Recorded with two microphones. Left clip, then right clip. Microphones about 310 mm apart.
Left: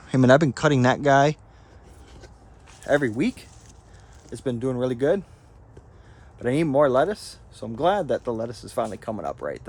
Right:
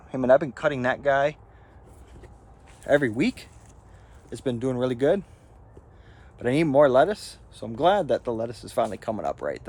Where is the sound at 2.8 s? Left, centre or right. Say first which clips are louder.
Even; centre.